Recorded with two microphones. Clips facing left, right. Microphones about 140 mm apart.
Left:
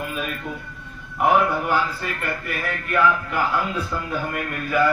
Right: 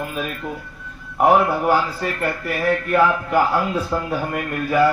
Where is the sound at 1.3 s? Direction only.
35° right (ahead or behind).